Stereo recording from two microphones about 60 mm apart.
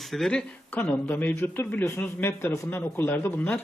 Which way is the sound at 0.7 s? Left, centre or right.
Left.